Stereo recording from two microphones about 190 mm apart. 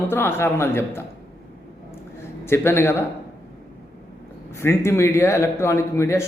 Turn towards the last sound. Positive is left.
turn(degrees=15)  # may be behind; listen again after turning